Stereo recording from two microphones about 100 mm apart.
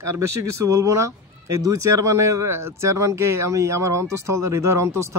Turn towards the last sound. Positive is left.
turn(degrees=-30)  # may be behind; listen again after turning